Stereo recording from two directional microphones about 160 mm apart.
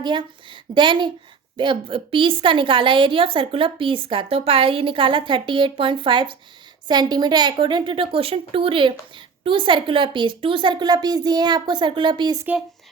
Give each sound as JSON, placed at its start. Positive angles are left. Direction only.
{"t": 0.0, "sound": "a woman's voice", "side_deg": -30}